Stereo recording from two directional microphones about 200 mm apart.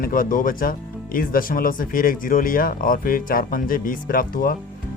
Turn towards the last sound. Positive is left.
turn(degrees=45)  # may be behind; listen again after turning